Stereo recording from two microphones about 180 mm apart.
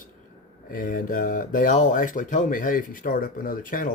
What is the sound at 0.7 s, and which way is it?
Speech, 50° left (ahead or behind).